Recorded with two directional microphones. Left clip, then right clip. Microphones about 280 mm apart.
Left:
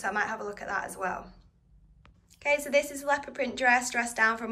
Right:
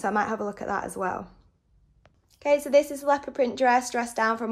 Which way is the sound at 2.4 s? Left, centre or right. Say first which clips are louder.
Right 5 dB; centre.